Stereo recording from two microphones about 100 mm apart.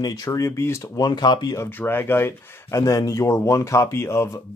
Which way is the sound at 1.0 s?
45° left (ahead or behind).